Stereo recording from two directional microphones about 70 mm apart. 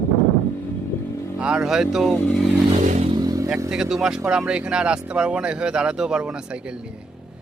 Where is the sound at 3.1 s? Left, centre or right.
Right.